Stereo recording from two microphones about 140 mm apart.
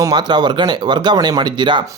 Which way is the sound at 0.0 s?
30° right (ahead or behind).